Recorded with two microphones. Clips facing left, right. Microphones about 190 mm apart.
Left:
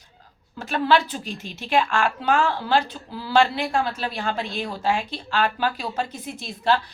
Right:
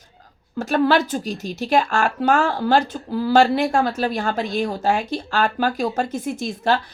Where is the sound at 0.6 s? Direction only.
45° right (ahead or behind).